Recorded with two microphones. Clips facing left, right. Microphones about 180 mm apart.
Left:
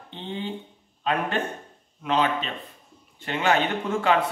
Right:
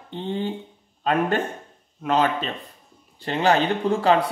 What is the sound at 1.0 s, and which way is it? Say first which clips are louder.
A man's voice: right 4 dB; 45° right (ahead or behind).